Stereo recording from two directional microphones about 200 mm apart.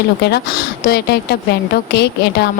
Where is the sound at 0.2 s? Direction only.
55° left (ahead or behind).